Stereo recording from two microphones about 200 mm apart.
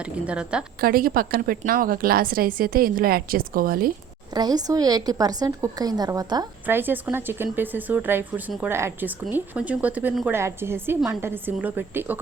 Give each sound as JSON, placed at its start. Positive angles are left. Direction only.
{"t": 0.0, "sound": "a woman's voice", "side_deg": -5}
{"t": 0.8, "sound": "a woman's voice", "side_deg": -45}
{"t": 4.4, "sound": "a woman's voice", "side_deg": -20}